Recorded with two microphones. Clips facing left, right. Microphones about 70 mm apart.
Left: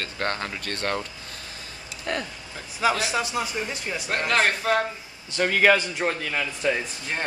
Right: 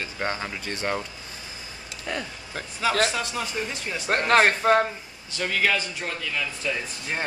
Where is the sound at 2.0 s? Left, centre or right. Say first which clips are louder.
Left 2 dB; centre.